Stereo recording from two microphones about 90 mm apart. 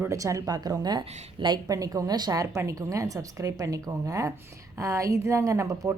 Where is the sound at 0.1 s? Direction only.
35° right (ahead or behind); by 1.5 s 55° right (ahead or behind).